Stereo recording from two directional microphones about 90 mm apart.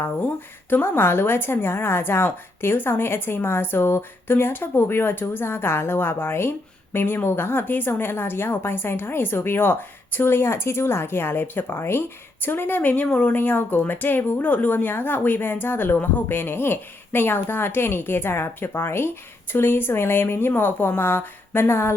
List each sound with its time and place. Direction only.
0.0 s a woman's voice: 20° left (ahead or behind)